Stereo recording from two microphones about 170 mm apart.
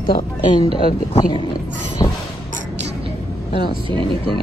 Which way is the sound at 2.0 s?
25° left (ahead or behind).